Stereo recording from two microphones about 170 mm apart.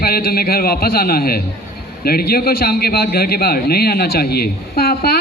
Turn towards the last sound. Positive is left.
turn(degrees=65)  # may be behind; listen again after turning